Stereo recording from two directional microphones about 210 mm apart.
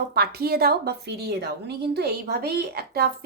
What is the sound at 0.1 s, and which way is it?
A child's voice, 45° right (ahead or behind).